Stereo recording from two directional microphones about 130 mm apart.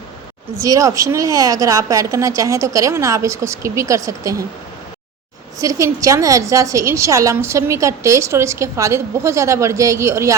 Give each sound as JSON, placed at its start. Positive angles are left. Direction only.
{"t": 0.6, "sound": "a woman's voice", "side_deg": -25}
{"t": 5.5, "sound": "a woman's voice", "side_deg": -25}